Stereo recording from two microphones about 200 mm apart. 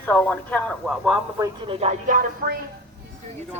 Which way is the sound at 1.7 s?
35° right (ahead or behind).